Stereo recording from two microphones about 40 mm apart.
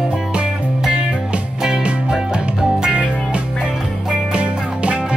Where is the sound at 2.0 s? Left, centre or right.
Centre.